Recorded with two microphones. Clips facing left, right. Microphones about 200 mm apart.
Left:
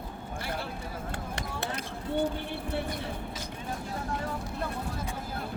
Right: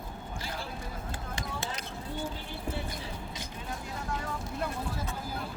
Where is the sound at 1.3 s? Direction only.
60° left (ahead or behind).